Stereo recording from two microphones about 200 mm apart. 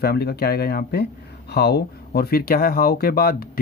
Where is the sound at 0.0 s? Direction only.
50° left (ahead or behind).